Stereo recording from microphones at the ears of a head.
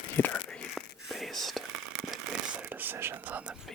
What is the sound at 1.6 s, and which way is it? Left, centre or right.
Whispering, right.